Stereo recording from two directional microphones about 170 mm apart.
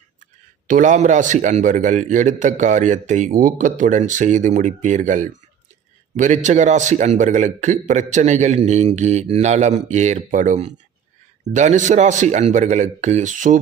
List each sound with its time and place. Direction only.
0.7 s a man's voice: 45° right (ahead or behind)